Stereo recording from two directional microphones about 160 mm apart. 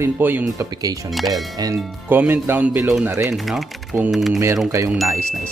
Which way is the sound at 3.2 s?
Centre (ahead or behind).